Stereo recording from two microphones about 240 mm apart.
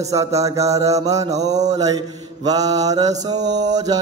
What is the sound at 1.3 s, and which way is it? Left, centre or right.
Mantra, right.